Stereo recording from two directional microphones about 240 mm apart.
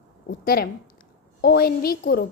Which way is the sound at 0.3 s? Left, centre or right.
Left.